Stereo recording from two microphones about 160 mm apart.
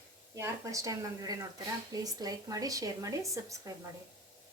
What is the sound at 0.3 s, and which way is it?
A woman's voice, 20° right (ahead or behind).